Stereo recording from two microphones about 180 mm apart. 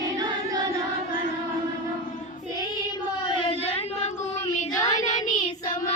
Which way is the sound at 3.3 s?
30° left (ahead or behind).